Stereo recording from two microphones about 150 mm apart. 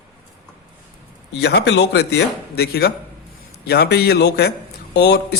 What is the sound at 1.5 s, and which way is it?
A man's voice, 90° left.